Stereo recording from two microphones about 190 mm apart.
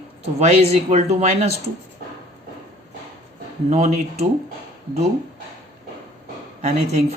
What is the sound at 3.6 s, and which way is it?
Speech, 35° right (ahead or behind).